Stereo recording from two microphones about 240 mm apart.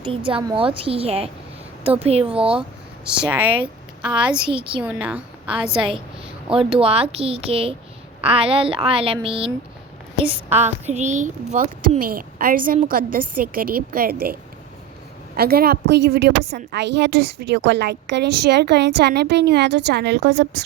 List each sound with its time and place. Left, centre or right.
0.0 s speech: right
3.0 s speech: centre
4.4 s speech: right
4.8 s a woman's voice: centre
6.5 s a woman's voice: right
15.4 s a woman's voice: right